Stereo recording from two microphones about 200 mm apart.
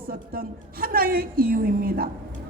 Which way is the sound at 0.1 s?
45° right (ahead or behind).